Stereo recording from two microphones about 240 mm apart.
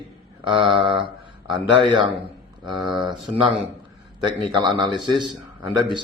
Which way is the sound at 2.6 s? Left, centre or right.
Centre.